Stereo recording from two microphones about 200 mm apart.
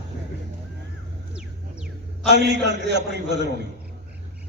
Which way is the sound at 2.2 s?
60° right (ahead or behind).